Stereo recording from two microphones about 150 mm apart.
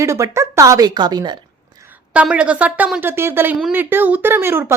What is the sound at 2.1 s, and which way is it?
A woman's voice, 10° right (ahead or behind).